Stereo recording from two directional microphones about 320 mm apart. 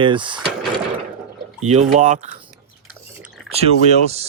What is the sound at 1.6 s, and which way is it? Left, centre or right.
Speech, right.